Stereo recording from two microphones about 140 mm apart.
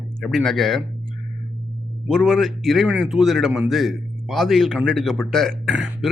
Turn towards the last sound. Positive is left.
turn(degrees=0)  # may be behind; listen again after turning